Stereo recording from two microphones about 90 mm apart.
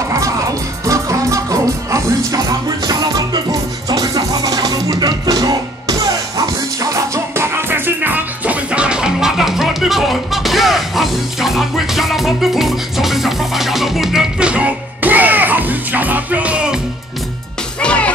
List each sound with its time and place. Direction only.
0.8 s music: 35° right (ahead or behind)
3.9 s music: 45° right (ahead or behind)
7.3 s music: 25° right (ahead or behind); by 16.8 s 10° right (ahead or behind)
17.7 s music: 15° left (ahead or behind)